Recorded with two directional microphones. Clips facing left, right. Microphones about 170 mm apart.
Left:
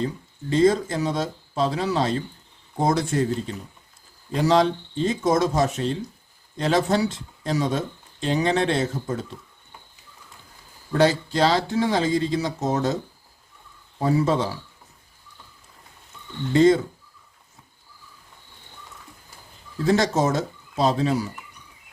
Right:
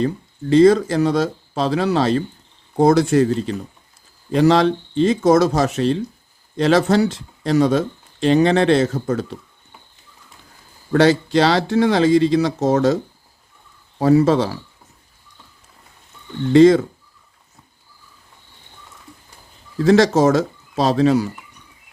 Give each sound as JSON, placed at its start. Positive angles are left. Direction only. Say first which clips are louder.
{"t": 0.5, "sound": "speech", "louder": "right 7 dB", "side_deg": -75}
{"t": 10.9, "sound": "speech", "louder": "right 6 dB", "side_deg": -80}
{"t": 14.0, "sound": "speech", "louder": "right 7 dB", "side_deg": -75}
{"t": 16.5, "sound": "speech", "louder": "right 6 dB", "side_deg": -90}
{"t": 19.8, "sound": "speech", "louder": "right 7 dB", "side_deg": -90}